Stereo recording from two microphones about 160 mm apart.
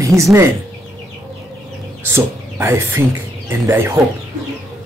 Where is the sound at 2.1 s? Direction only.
15° right (ahead or behind).